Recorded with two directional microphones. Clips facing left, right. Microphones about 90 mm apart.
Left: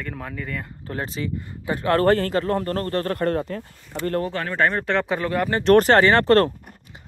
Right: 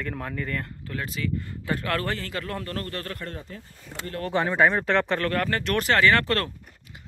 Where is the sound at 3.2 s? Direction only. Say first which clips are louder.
Left 14 dB; 60° left (ahead or behind).